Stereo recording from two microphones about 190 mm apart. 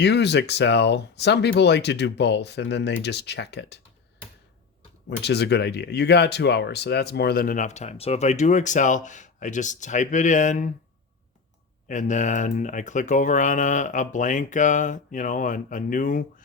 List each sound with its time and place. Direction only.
0.0 s speech: 65° left (ahead or behind)
5.2 s speech: 60° left (ahead or behind); by 10.7 s 40° left (ahead or behind)
11.9 s speech: 40° left (ahead or behind)